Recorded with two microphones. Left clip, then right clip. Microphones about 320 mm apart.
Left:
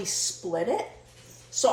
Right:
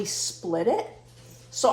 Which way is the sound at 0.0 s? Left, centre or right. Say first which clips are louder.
Even; centre.